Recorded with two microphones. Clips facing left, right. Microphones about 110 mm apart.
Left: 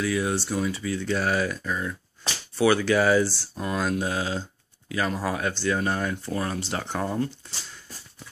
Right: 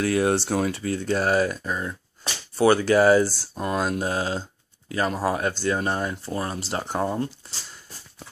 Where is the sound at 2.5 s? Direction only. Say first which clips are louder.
Right 3 dB; 40° right (ahead or behind).